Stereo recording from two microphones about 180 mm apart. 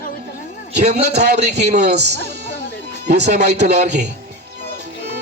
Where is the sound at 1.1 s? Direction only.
65° right (ahead or behind).